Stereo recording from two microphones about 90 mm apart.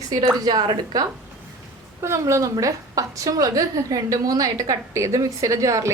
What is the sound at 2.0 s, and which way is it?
A woman's voice, 35° right (ahead or behind).